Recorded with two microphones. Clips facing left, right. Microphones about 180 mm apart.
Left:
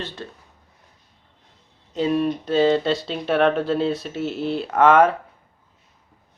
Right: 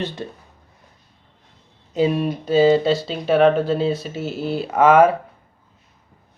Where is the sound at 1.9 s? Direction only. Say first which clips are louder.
Right 1 dB; 10° right (ahead or behind).